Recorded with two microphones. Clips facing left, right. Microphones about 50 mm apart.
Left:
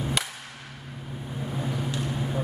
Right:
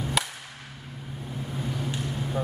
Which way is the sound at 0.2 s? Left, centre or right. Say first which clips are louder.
Right 6 dB; centre.